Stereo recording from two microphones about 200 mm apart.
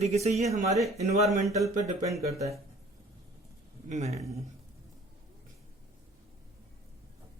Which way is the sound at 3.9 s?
35° right (ahead or behind).